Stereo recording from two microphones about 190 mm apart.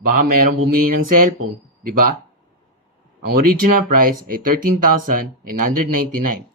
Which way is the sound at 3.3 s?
50° right (ahead or behind).